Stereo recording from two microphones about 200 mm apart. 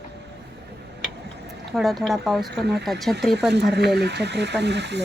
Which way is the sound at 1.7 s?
Centre (ahead or behind).